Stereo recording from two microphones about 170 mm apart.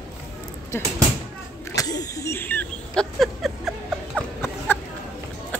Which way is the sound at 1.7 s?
20° left (ahead or behind).